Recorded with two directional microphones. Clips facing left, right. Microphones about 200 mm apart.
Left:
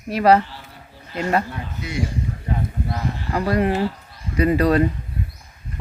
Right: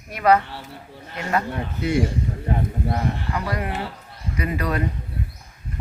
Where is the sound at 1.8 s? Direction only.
55° right (ahead or behind).